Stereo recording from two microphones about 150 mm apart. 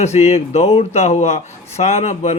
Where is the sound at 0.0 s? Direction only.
45° left (ahead or behind).